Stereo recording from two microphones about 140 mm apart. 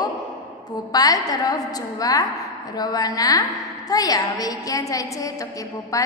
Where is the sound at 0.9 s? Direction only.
25° left (ahead or behind).